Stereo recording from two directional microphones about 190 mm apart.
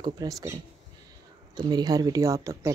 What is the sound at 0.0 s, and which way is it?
Speech, 20° right (ahead or behind).